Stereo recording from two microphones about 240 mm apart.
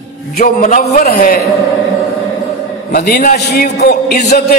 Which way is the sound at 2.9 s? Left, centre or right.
Left.